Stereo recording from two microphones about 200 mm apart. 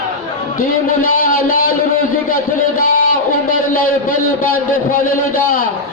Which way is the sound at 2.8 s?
45° left (ahead or behind).